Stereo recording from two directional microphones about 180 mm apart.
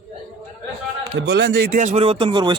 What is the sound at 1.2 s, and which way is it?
Speech, 75° right (ahead or behind).